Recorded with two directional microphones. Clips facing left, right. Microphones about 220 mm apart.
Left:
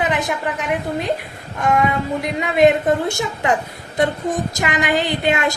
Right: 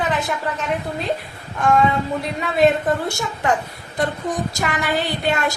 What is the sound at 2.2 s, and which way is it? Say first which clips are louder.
A woman's voice: left 3 dB; 20° left (ahead or behind).